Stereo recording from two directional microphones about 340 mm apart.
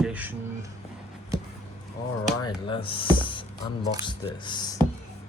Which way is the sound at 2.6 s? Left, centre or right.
Centre.